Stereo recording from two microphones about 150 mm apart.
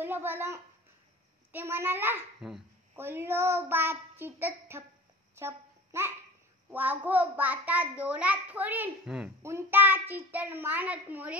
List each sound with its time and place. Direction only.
0.0 s a child's voice: 15° right (ahead or behind)
5.3 s babbling: 15° right (ahead or behind)
6.7 s a child's voice: 10° right (ahead or behind)
9.4 s a child's voice: 15° right (ahead or behind)